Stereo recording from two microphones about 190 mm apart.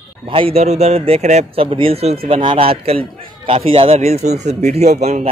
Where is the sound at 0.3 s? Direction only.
30° right (ahead or behind).